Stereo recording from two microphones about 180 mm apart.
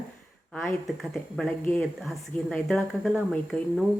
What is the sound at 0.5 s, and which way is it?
Speech, centre (ahead or behind).